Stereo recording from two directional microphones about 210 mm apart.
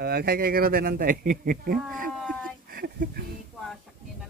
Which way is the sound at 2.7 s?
45° right (ahead or behind).